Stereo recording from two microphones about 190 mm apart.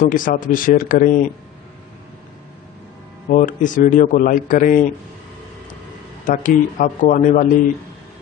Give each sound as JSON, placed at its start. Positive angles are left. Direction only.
{"t": 0.1, "sound": "a man's voice", "side_deg": 45}
{"t": 3.3, "sound": "a man's voice", "side_deg": 45}
{"t": 6.2, "sound": "a man's voice", "side_deg": 40}